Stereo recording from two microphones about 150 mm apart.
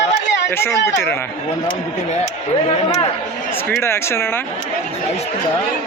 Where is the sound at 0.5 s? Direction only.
15° left (ahead or behind).